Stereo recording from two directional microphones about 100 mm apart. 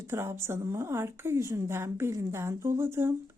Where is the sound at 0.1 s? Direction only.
25° right (ahead or behind).